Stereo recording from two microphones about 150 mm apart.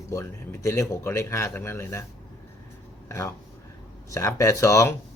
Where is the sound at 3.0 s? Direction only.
20° left (ahead or behind).